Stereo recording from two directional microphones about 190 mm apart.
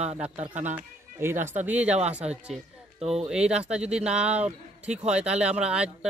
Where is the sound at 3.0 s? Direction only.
35° right (ahead or behind).